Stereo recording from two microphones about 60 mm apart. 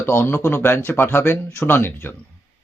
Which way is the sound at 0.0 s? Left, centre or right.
Left.